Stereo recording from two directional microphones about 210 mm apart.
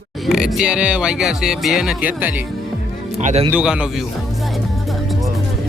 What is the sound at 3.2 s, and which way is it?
Speech, 35° right (ahead or behind).